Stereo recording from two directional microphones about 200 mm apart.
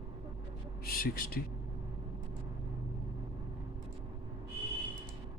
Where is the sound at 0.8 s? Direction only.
50° left (ahead or behind).